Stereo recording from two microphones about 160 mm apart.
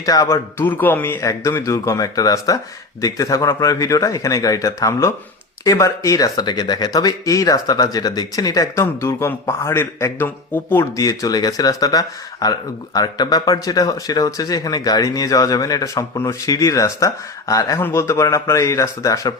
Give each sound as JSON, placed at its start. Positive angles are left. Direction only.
{"t": 0.0, "sound": "speech", "side_deg": 20}
{"t": 0.6, "sound": "speech", "side_deg": 10}